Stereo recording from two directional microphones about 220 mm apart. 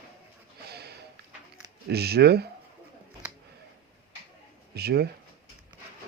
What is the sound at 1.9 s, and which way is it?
Speech, 45° right (ahead or behind).